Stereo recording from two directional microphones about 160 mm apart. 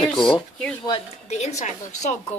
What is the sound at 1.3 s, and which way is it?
Speech, 45° left (ahead or behind).